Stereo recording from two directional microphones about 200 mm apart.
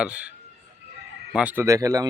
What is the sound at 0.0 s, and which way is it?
Speech, 5° right (ahead or behind).